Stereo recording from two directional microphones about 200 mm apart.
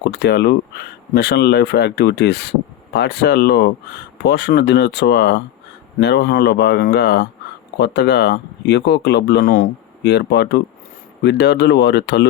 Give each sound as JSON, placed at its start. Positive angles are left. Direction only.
{"t": 0.0, "sound": "speech", "side_deg": 55}